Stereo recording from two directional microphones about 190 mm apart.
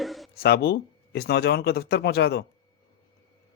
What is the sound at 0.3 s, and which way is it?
Speech, 55° left (ahead or behind).